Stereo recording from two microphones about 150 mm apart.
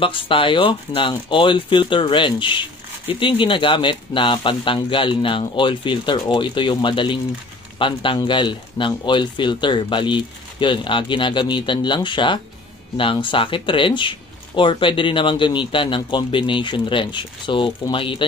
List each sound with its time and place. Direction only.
0.0 s speech: 35° left (ahead or behind)